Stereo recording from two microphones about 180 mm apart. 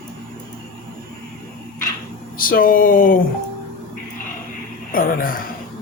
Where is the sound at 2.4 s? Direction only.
50° left (ahead or behind).